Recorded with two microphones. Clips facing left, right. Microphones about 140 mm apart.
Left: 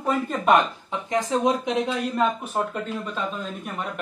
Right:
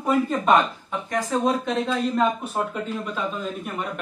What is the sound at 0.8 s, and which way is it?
Speech, 20° left (ahead or behind).